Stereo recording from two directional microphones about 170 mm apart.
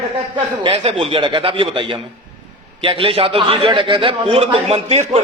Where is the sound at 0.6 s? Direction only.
30° right (ahead or behind).